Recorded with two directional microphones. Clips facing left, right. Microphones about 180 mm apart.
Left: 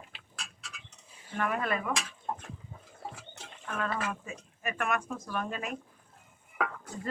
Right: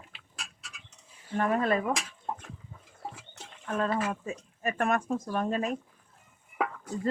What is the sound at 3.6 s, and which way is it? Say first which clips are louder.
Speech: right 5 dB; 30° right (ahead or behind).